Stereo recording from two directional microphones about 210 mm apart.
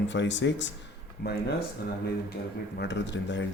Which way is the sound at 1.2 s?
50° left (ahead or behind).